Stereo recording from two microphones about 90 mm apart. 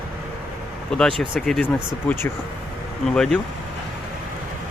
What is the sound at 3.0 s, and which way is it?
Speech, 5° left (ahead or behind).